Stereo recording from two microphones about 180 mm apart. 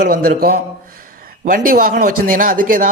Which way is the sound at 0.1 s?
55° right (ahead or behind).